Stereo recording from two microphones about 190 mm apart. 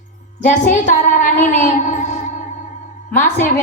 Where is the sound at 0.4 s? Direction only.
40° left (ahead or behind).